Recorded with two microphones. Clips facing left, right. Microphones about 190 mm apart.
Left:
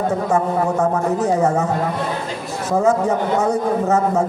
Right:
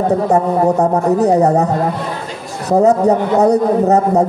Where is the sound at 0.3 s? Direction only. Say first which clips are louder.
Right 4 dB; 35° right (ahead or behind).